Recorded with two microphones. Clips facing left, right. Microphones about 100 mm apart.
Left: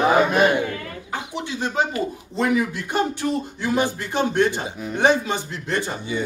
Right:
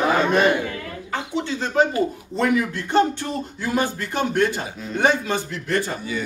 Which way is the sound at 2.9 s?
10° left (ahead or behind).